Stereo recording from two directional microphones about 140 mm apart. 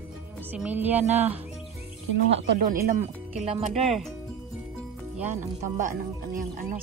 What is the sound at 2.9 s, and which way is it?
Speech, 50° right (ahead or behind).